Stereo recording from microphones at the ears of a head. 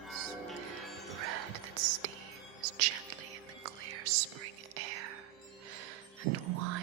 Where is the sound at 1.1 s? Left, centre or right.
Right.